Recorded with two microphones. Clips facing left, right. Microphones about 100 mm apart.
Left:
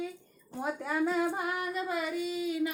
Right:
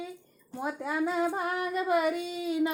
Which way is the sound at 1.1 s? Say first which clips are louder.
Right 1 dB; 20° right (ahead or behind).